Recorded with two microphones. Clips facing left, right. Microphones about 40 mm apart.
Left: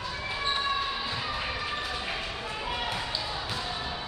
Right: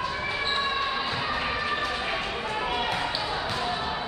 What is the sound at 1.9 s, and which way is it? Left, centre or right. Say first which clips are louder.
Basketball bounce: right 4 dB; centre.